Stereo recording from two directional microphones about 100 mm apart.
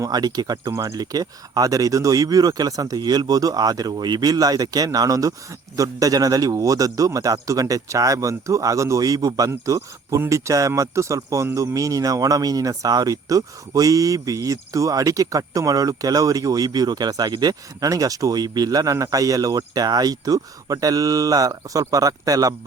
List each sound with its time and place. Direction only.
0.0 s speech: 40° right (ahead or behind)